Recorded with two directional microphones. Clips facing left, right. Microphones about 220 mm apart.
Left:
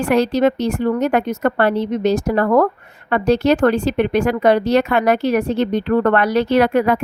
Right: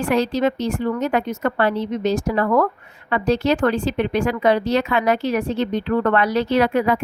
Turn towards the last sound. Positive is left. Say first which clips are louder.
# left 3 dB
turn(degrees=60)  # may be behind; listen again after turning